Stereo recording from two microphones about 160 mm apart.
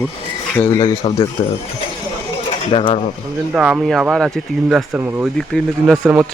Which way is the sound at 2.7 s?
35° left (ahead or behind).